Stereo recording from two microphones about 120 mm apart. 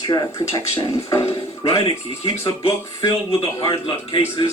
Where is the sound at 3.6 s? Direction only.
45° left (ahead or behind).